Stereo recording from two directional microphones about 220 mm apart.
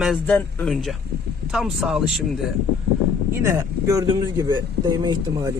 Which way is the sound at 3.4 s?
15° right (ahead or behind).